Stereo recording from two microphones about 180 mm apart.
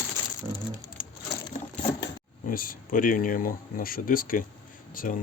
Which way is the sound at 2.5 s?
50° left (ahead or behind).